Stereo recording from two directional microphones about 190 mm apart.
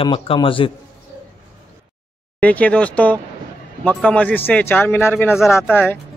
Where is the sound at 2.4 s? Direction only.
5° left (ahead or behind).